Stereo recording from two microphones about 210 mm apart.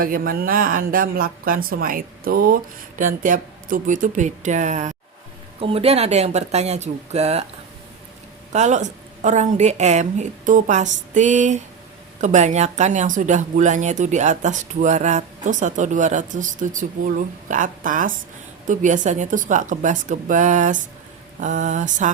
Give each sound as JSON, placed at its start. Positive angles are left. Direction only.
{"t": 0.0, "sound": "speech", "side_deg": -45}
{"t": 8.5, "sound": "a woman's voice", "side_deg": -35}